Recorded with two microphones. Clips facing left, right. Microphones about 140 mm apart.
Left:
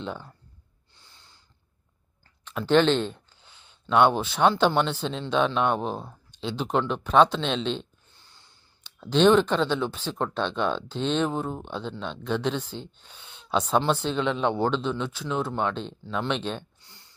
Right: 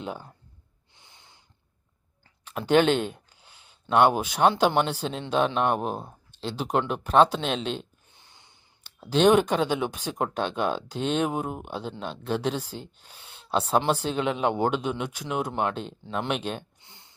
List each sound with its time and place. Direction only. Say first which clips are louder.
0.0 s speech: even; 10° right (ahead or behind)
0.9 s snort: right 1 dB; 20° right (ahead or behind)
2.4 s speech: even; 10° right (ahead or behind)
8.1 s a sound: right 1 dB; 20° right (ahead or behind)
8.8 s speech: left 1 dB; 10° right (ahead or behind)
16.8 s a sound: right 1 dB; 20° right (ahead or behind)